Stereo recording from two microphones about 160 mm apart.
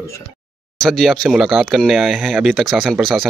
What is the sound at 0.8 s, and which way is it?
Speech, centre (ahead or behind).